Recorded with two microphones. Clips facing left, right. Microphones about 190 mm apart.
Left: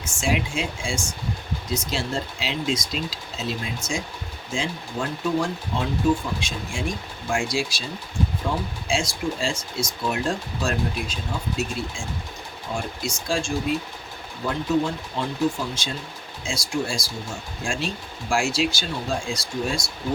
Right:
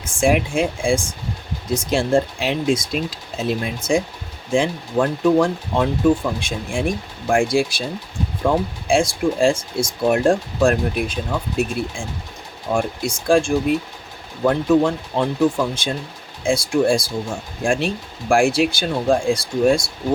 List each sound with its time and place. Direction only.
0.0 s speech: 55° right (ahead or behind)